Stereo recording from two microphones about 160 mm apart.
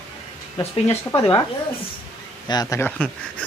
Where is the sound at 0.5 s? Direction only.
35° left (ahead or behind).